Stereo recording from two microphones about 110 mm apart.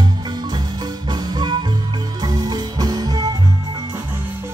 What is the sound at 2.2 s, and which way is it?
Music, 40° right (ahead or behind).